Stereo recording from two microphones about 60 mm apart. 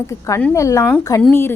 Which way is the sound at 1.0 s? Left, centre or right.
Left.